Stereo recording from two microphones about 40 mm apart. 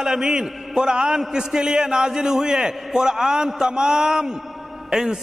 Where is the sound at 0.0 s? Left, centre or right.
Centre.